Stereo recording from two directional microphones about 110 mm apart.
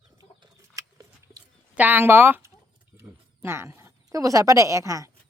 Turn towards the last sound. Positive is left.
turn(degrees=-30)  # may be behind; listen again after turning